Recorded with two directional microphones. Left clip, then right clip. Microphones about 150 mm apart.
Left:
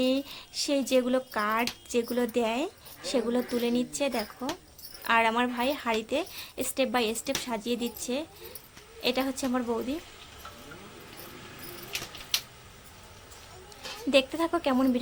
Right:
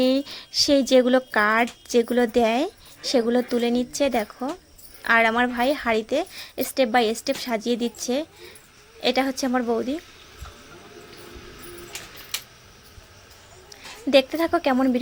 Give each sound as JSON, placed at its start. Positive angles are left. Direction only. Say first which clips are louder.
{"t": 0.0, "sound": "a woman's voice", "louder": "right 6 dB", "side_deg": -35}
{"t": 14.1, "sound": "a woman's voice", "louder": "right 6 dB", "side_deg": -30}